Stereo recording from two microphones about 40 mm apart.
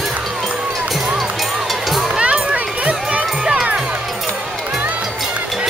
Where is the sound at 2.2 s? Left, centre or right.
Right.